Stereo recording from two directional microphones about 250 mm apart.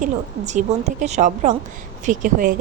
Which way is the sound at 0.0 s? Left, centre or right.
Right.